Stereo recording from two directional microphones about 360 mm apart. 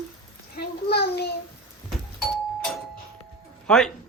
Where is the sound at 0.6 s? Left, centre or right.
Left.